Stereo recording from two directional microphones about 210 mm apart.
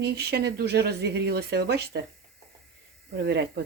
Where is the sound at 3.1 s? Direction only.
50° right (ahead or behind).